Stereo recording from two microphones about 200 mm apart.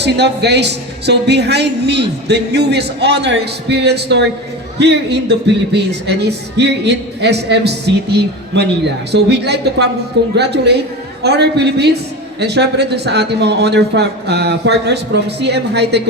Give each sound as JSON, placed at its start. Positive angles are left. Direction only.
{"t": 0.0, "sound": "a woman's voice", "side_deg": -60}